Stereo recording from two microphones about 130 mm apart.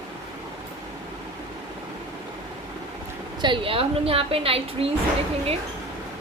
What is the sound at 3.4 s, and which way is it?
A woman's voice, 40° right (ahead or behind).